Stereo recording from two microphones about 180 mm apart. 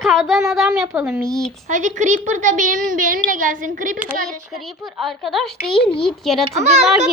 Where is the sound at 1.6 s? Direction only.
45° right (ahead or behind).